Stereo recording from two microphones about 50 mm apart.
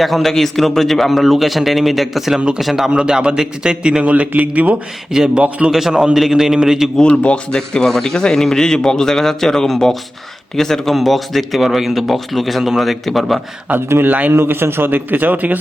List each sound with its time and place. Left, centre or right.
0.0 s a man's voice: centre
3.0 s a man's voice: centre
5.1 s a man's voice: centre
5.4 s a man's voice: right
5.7 s a man's voice: centre
6.9 s a man's voice: left; by 13.4 s centre
13.9 s a man's voice: right
14.3 s a man's voice: right